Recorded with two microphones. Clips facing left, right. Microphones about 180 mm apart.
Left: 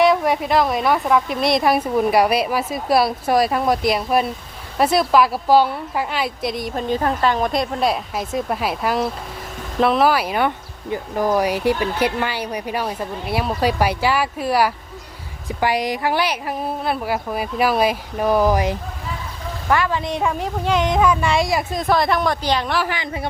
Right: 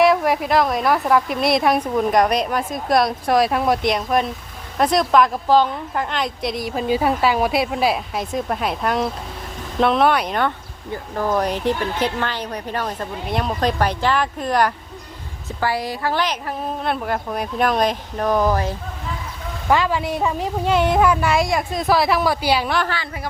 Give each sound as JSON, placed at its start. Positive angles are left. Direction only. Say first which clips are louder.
{"t": 0.0, "sound": "a woman's voice", "louder": "even", "side_deg": 0}
{"t": 19.6, "sound": "speech", "louder": "right 1 dB", "side_deg": -15}
{"t": 22.8, "sound": "speech", "louder": "left 1 dB", "side_deg": 15}